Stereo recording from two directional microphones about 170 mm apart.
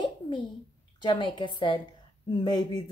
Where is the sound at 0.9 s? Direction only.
25° left (ahead or behind).